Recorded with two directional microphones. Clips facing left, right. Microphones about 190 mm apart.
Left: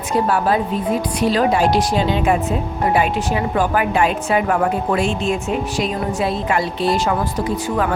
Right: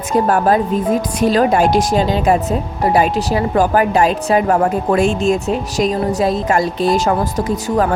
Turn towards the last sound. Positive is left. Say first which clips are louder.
# right 3 dB
turn(degrees=-45)  # may be behind; listen again after turning